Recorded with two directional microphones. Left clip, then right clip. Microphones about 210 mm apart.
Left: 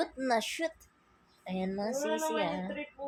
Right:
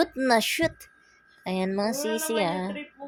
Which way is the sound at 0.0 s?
45° right (ahead or behind).